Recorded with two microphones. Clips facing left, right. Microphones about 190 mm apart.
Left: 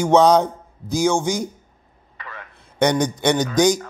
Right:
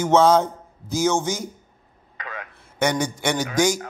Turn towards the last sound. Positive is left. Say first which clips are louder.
# left 4 dB
turn(degrees=20)  # may be behind; listen again after turning